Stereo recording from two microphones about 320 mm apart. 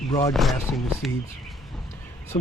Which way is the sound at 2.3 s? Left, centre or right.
Centre.